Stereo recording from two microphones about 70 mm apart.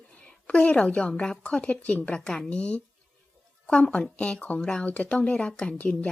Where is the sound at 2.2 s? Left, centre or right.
Centre.